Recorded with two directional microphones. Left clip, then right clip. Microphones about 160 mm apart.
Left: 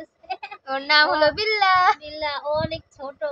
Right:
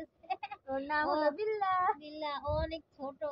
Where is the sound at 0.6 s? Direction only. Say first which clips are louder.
Left 15 dB; 40° left (ahead or behind).